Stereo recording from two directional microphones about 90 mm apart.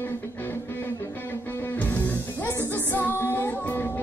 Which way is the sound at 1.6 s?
20° left (ahead or behind).